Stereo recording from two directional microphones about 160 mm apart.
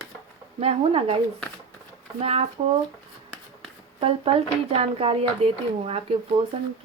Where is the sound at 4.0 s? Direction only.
40° right (ahead or behind).